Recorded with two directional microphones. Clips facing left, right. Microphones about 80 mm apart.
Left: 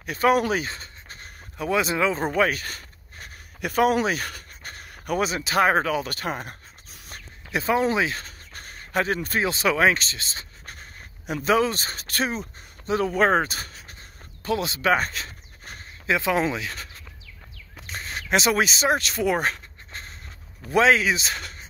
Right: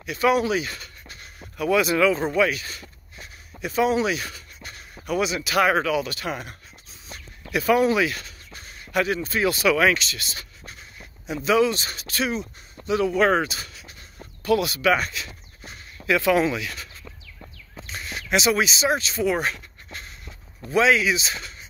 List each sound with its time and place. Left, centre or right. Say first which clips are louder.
0.0 s speech: even; left
0.7 s writing: even; left
2.2 s a sound: right 1 dB; left
4.0 s speech: right 1 dB; left
7.5 s a sound: right 3 dB; left
8.9 s speech: right 1 dB; left
10.6 s writing: even; left
11.4 s speech: right 1 dB; left
14.4 s a sound: right 4 dB; left
16.1 s speech: right 3 dB; left
17.8 s a sound: left 1 dB; left
20.7 s speech: even; left